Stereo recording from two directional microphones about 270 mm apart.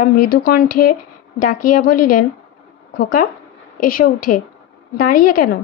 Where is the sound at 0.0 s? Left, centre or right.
Left.